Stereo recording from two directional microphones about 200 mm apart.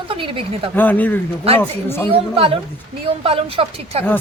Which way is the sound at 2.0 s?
25° right (ahead or behind).